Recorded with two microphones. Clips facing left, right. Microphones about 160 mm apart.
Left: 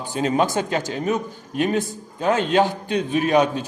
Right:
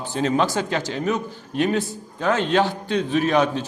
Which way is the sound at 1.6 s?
20° left (ahead or behind).